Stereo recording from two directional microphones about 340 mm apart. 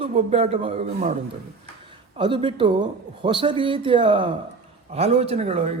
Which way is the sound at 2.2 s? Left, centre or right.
Centre.